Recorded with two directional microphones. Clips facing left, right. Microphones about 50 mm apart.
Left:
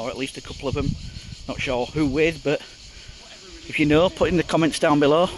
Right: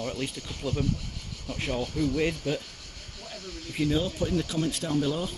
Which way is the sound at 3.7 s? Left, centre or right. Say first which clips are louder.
Left 10 dB; left.